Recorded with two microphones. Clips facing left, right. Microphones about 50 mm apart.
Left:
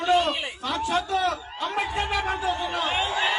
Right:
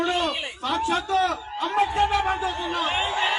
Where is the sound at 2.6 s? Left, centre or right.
Centre.